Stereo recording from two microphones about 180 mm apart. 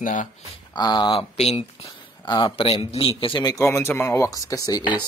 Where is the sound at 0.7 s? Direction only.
25° left (ahead or behind).